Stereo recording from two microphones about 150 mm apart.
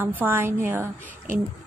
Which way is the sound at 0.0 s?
15° right (ahead or behind).